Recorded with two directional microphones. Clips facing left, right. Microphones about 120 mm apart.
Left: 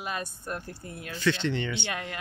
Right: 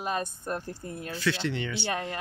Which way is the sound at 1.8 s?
35° right (ahead or behind).